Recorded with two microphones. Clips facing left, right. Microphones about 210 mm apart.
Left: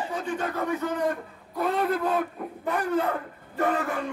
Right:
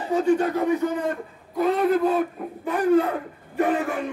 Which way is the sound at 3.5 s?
15° right (ahead or behind).